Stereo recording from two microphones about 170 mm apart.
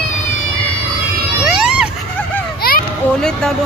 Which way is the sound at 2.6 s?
65° left (ahead or behind).